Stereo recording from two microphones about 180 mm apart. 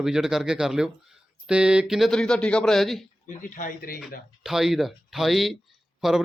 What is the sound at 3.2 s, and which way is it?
Speech, 45° left (ahead or behind).